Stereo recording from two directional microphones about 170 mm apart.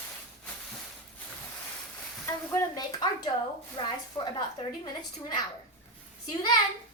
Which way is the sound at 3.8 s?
30° left (ahead or behind).